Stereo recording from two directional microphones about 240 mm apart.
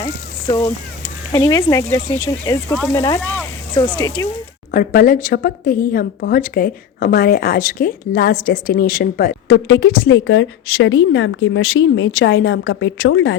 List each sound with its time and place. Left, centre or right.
0.0 s a sound: centre
1.3 s speech: centre
2.6 s speech: centre
4.2 s speech: centre
4.7 s speech: left
9.6 s a woman's voice: left